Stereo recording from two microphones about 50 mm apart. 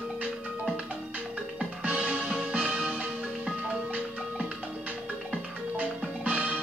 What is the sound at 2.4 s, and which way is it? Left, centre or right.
Music, right.